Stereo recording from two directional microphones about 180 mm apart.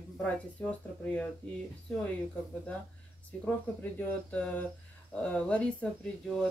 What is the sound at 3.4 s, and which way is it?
Speech, 10° left (ahead or behind).